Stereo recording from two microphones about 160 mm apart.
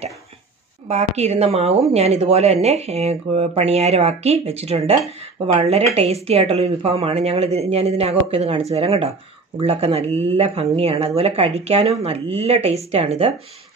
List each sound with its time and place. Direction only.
0.8 s a woman's voice: 45° right (ahead or behind)